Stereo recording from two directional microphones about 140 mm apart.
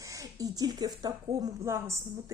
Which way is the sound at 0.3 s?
25° right (ahead or behind).